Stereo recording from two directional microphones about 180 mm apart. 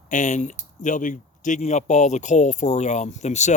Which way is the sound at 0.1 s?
45° left (ahead or behind).